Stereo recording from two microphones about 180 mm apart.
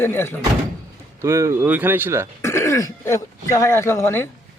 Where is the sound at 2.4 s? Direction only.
15° left (ahead or behind).